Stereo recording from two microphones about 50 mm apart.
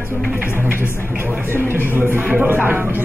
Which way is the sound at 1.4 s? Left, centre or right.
Right.